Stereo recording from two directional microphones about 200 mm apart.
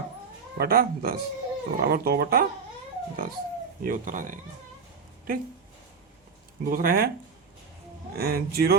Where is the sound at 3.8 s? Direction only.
40° right (ahead or behind).